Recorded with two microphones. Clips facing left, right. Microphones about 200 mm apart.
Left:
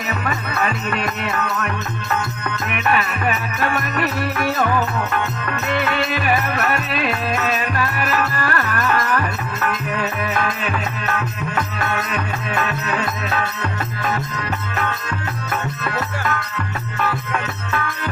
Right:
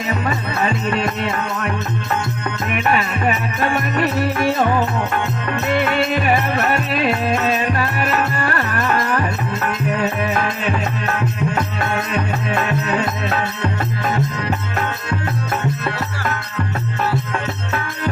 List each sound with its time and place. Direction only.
0.1 s music: 25° right (ahead or behind)
2.7 s music: 30° right (ahead or behind)
17.1 s music: 30° right (ahead or behind)